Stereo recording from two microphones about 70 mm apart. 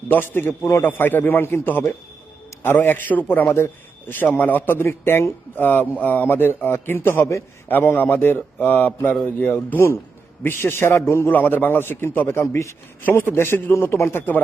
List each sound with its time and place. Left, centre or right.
0.1 s a man's voice: left
7.7 s a man's voice: left
11.3 s a man's voice: left
12.4 s a man's voice: left
13.1 s a man's voice: left